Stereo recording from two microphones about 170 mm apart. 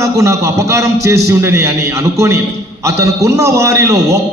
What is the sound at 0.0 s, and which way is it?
A man's voice, 20° right (ahead or behind).